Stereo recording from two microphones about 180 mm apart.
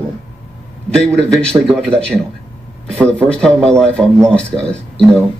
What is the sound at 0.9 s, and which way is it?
Speech, 5° left (ahead or behind).